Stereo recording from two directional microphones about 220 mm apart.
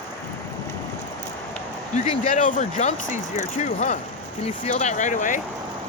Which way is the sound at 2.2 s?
35° left (ahead or behind).